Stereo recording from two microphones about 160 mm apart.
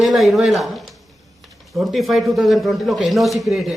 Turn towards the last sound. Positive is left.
turn(degrees=0)  # may be behind; listen again after turning